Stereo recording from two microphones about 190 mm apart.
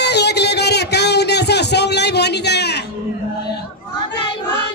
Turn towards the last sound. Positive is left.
turn(degrees=60)  # may be behind; listen again after turning